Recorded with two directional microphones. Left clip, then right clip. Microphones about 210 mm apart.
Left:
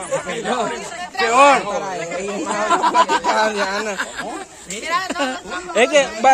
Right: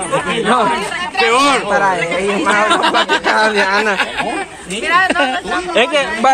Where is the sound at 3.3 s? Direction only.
25° left (ahead or behind).